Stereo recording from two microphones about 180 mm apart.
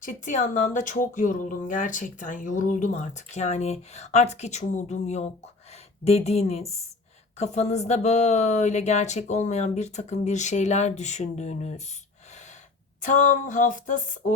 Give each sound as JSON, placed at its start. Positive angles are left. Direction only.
{"t": 0.0, "sound": "speech", "side_deg": 45}
{"t": 13.0, "sound": "speech", "side_deg": 45}